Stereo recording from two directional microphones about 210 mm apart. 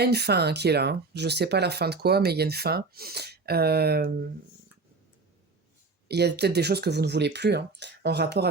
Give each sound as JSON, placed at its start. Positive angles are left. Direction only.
{"t": 0.0, "sound": "speech", "side_deg": -50}
{"t": 6.1, "sound": "speech", "side_deg": -50}